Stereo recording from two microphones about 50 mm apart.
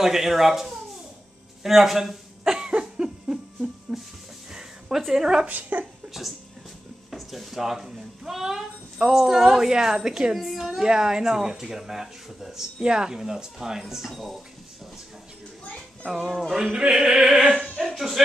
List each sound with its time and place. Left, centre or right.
0.0 s speech: centre
1.6 s a sound: centre
5.1 s speech: centre
5.5 s speech: right
7.1 s speech: centre
10.3 s speech: centre
16.1 s speech: centre